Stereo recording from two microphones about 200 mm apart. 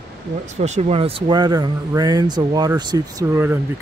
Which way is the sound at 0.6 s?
35° right (ahead or behind).